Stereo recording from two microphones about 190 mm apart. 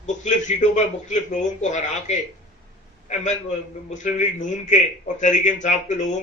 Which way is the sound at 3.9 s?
40° left (ahead or behind).